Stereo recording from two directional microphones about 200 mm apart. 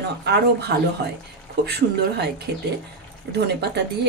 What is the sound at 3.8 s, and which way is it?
Speech, 55° right (ahead or behind).